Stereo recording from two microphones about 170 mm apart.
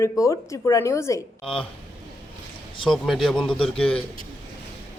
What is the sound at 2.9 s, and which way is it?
Speech, centre (ahead or behind).